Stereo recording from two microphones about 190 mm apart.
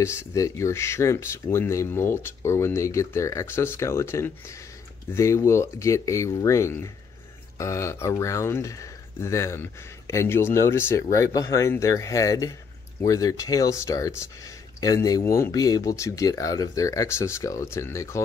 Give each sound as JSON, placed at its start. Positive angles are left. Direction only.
{"t": 0.0, "sound": "speech", "side_deg": 15}